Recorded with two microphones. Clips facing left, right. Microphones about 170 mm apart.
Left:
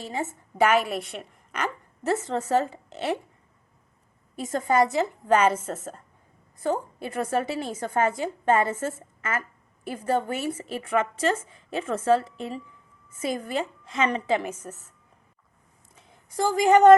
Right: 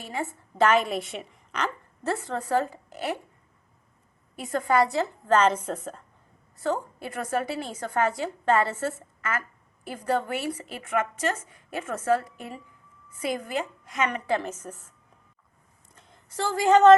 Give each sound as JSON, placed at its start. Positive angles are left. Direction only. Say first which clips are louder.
{"t": 0.2, "sound": "a woman's voice", "louder": "right 1 dB", "side_deg": 20}
{"t": 0.6, "sound": "a woman's voice", "louder": "even", "side_deg": 5}
{"t": 2.0, "sound": "a woman's voice", "louder": "left 3 dB", "side_deg": 20}
{"t": 4.6, "sound": "a woman's voice", "louder": "left 1 dB", "side_deg": 20}
{"t": 6.6, "sound": "a woman's voice", "louder": "left 1 dB", "side_deg": 20}
{"t": 14.3, "sound": "a woman's voice", "louder": "left 1 dB", "side_deg": 10}
{"t": 16.0, "sound": "speech", "louder": "left 4 dB", "side_deg": 10}